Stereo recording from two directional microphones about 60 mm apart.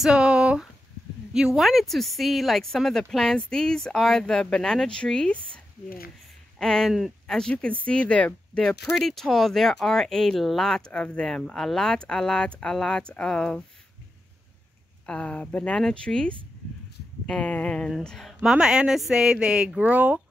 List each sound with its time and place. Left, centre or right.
0.0 s a sound: centre
1.3 s speech: centre
6.6 s speech: centre
10.9 s speech: centre
15.0 s speech: centre
18.0 s speech: centre
18.4 s speech: centre
19.8 s speech: right